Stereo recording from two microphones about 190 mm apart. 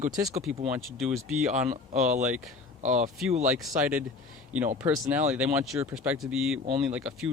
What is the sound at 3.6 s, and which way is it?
Speech, 5° right (ahead or behind).